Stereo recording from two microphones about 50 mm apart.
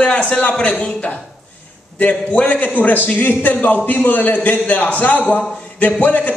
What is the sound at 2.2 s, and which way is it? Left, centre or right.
A man's voice, left.